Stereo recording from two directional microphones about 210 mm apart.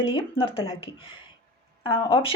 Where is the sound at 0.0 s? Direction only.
25° left (ahead or behind).